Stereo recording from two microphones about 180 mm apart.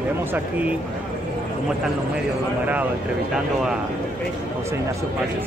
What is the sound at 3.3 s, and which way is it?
Speech, centre (ahead or behind).